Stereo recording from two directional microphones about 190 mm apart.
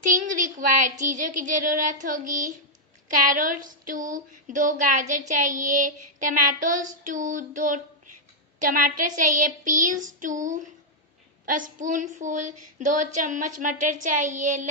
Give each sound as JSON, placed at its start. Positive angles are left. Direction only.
{"t": 0.4, "sound": "child singing", "side_deg": -40}
{"t": 11.4, "sound": "speech", "side_deg": -45}
{"t": 13.6, "sound": "child singing", "side_deg": -40}